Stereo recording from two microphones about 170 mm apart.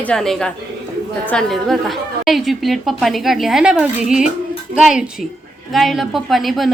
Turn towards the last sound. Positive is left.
turn(degrees=0)  # may be behind; listen again after turning